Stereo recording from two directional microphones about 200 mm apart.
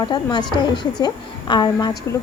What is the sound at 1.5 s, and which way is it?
Speech, 20° left (ahead or behind).